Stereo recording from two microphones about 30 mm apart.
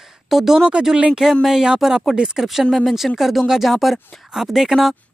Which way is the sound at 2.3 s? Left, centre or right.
Centre.